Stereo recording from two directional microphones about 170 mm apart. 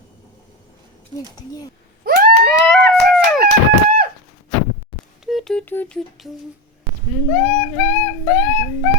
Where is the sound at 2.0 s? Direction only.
60° right (ahead or behind).